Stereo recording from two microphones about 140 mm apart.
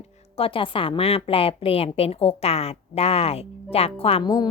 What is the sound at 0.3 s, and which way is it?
A woman's voice, 40° left (ahead or behind).